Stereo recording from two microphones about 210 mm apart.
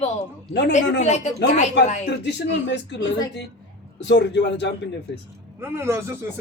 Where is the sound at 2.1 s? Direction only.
55° left (ahead or behind).